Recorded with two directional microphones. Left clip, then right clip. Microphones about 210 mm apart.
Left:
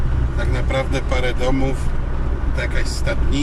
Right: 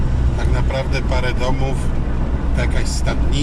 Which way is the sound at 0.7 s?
5° right (ahead or behind).